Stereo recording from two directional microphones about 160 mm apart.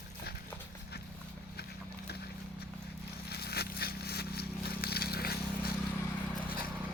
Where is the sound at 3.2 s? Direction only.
80° left.